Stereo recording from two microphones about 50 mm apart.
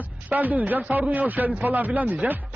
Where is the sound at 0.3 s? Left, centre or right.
Right.